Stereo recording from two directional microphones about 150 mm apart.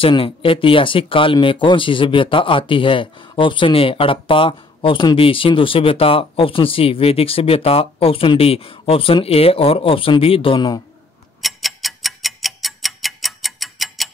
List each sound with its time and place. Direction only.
0.0 s speech: 35° left (ahead or behind)
11.4 s tick-tock: centre (ahead or behind)